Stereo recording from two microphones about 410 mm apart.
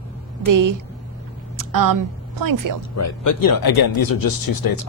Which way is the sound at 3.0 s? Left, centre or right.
Left.